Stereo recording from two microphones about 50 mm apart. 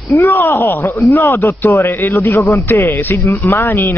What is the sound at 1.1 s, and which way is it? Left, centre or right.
Speech, left.